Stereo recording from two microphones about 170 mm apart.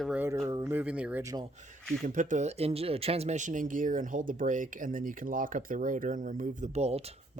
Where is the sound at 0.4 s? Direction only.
15° right (ahead or behind).